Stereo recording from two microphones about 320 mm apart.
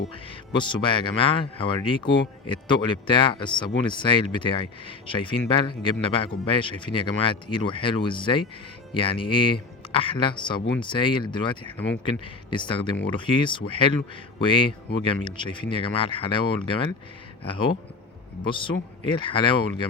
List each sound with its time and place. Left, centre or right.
0.1 s speech: centre